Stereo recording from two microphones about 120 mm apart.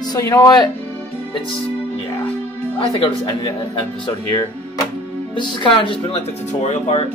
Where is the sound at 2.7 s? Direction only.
45° left (ahead or behind).